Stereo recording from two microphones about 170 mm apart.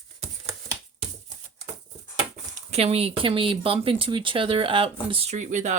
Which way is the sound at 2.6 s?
40° right (ahead or behind).